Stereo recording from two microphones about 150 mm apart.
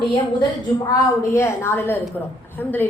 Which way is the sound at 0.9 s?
20° left (ahead or behind).